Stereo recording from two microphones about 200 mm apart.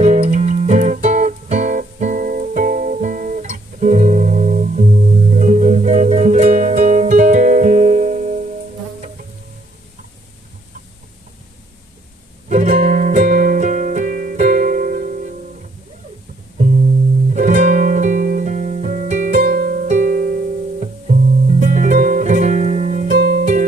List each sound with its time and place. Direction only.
0.0 s music: 35° right (ahead or behind)
12.4 s music: 35° right (ahead or behind)
17.3 s music: 40° right (ahead or behind)